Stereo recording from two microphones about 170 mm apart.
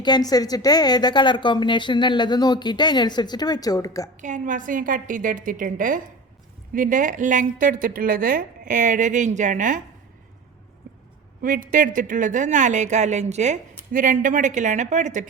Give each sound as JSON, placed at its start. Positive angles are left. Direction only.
{"t": 0.0, "sound": "a woman's voice", "side_deg": 25}
{"t": 4.2, "sound": "a woman's voice", "side_deg": -45}
{"t": 11.4, "sound": "a woman's voice", "side_deg": -50}